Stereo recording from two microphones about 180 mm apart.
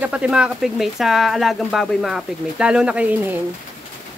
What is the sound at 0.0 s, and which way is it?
Speech, 5° right (ahead or behind).